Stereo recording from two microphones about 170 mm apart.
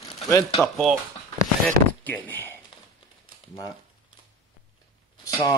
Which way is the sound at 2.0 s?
10° left (ahead or behind).